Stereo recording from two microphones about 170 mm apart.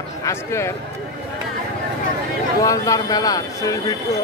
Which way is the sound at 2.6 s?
20° left (ahead or behind).